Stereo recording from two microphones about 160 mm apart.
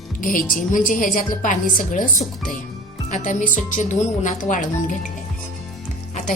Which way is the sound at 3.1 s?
50° left (ahead or behind).